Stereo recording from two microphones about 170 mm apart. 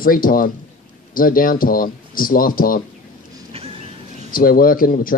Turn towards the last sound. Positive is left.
turn(degrees=55)  # may be behind; listen again after turning